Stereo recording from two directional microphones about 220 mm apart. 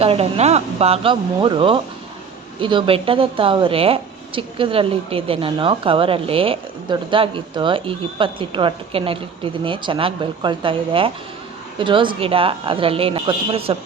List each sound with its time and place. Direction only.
0.0 s speech: 25° right (ahead or behind)